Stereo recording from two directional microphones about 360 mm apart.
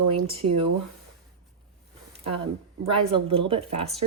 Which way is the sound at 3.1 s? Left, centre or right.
Centre.